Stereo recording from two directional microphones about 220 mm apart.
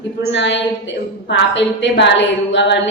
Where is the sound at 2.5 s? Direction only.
55° left (ahead or behind).